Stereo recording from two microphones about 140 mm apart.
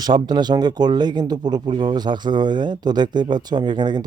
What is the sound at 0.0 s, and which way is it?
Speech, 30° right (ahead or behind).